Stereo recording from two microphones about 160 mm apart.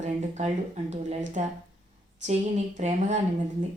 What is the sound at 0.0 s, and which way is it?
Speech, 45° right (ahead or behind).